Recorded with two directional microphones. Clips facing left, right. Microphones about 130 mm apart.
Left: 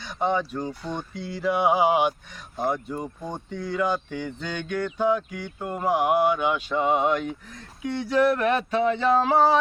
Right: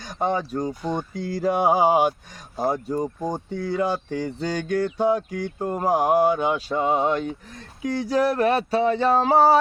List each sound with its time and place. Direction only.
0.0 s speech: 45° right (ahead or behind)